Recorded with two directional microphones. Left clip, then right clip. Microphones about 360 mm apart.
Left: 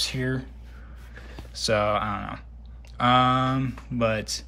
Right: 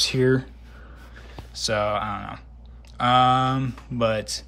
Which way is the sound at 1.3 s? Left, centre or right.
Centre.